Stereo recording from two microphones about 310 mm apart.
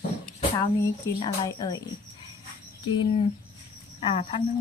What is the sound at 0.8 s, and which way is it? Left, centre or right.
Speech, centre.